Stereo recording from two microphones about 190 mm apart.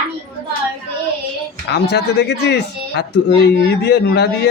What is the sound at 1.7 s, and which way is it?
Speech, 60° left (ahead or behind).